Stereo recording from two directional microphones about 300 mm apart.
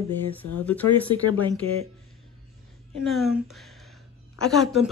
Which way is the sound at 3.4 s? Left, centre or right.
Centre.